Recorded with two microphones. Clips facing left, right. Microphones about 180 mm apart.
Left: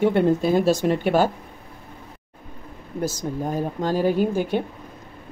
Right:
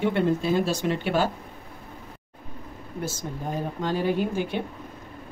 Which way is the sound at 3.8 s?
40° left (ahead or behind).